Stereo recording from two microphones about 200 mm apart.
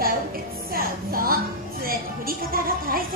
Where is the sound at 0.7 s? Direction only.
45° right (ahead or behind).